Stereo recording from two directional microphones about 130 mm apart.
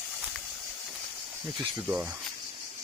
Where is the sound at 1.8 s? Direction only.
10° right (ahead or behind).